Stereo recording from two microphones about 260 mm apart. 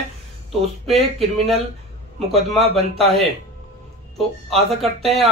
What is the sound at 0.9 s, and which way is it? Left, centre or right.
Speech, right.